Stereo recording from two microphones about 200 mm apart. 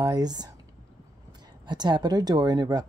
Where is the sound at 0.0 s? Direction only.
20° right (ahead or behind).